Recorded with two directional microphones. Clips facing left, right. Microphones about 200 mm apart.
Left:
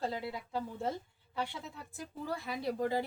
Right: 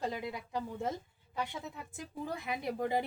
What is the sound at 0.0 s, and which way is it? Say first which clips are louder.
Speech: even; 15° right (ahead or behind).